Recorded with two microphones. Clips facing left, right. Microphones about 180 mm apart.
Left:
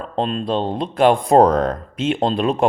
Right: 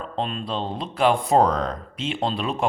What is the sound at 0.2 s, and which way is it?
A man's voice, 40° left (ahead or behind).